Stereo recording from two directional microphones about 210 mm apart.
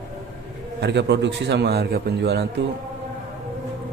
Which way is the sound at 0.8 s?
55° right (ahead or behind).